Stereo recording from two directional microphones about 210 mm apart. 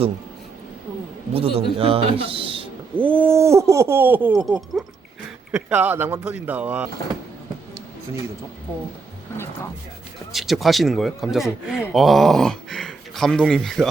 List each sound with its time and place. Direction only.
1.3 s a man's voice: 25° right (ahead or behind)
2.9 s speech: 10° right (ahead or behind)
10.3 s speech: centre (ahead or behind)